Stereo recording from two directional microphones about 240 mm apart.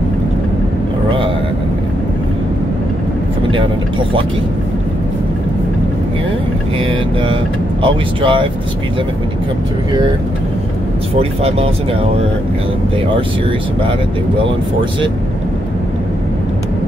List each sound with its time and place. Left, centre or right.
7.8 s speech: right
11.1 s speech: right